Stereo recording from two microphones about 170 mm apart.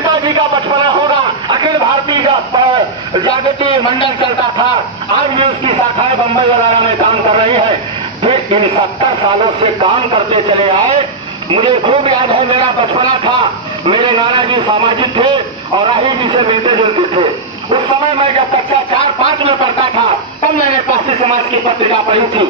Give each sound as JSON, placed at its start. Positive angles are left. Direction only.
{"t": 0.0, "sound": "a sound", "side_deg": -25}
{"t": 5.3, "sound": "a man's voice", "side_deg": -35}
{"t": 13.8, "sound": "a man's voice", "side_deg": -30}
{"t": 18.9, "sound": "speech", "side_deg": 30}
{"t": 19.4, "sound": "a man's voice", "side_deg": -30}
{"t": 21.1, "sound": "a man's voice", "side_deg": -35}